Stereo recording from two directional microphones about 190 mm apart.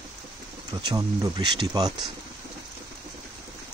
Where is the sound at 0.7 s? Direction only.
20° right (ahead or behind).